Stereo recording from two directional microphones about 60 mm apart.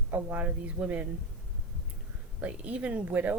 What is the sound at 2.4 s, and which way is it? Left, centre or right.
Speech, right.